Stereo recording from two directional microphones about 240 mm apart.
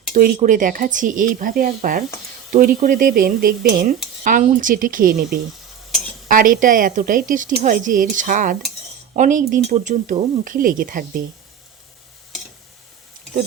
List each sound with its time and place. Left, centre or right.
0.1 s speech: right
6.3 s speech: right